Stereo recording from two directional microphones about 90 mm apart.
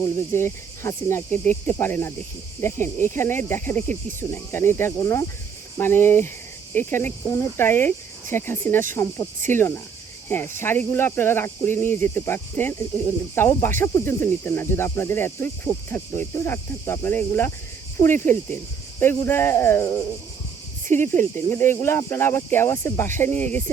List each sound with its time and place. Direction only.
0.2 s cricket: 30° left (ahead or behind)